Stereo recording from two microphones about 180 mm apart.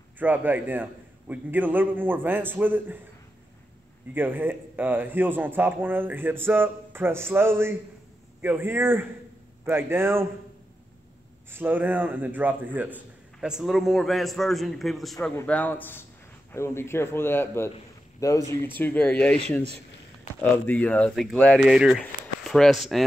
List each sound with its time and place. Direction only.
0.2 s a man's voice: 10° right (ahead or behind)
4.1 s a man's voice: 10° right (ahead or behind)
11.5 s a man's voice: 10° right (ahead or behind); by 19.1 s 10° left (ahead or behind)
20.3 s a man's voice: 5° left (ahead or behind)